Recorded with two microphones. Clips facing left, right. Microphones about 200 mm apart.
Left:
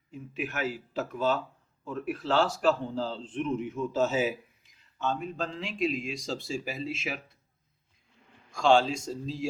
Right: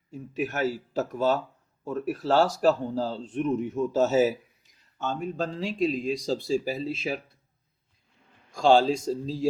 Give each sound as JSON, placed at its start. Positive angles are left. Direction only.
{"t": 0.1, "sound": "speech", "side_deg": -40}
{"t": 8.5, "sound": "speech", "side_deg": -35}